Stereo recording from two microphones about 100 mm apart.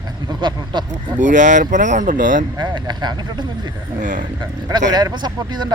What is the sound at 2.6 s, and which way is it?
Speech, 45° right (ahead or behind).